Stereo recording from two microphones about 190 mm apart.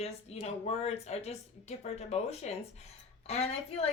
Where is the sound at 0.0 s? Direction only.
35° left (ahead or behind).